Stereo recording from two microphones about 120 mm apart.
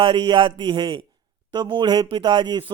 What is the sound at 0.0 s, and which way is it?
A man's voice, 45° right (ahead or behind).